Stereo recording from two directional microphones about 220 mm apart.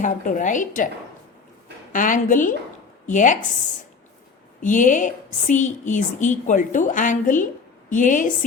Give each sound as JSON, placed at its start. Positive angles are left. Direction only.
{"t": 0.0, "sound": "a woman's voice", "side_deg": 35}
{"t": 1.9, "sound": "a woman's voice", "side_deg": 35}
{"t": 4.6, "sound": "a woman's voice", "side_deg": 35}